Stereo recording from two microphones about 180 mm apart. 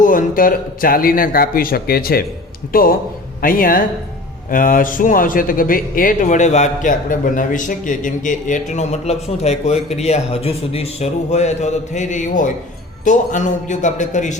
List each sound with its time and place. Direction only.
0.0 s a man's voice: 50° left (ahead or behind)